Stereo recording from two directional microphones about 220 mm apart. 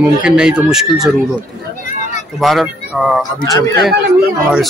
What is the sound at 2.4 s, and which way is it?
Speech, centre (ahead or behind).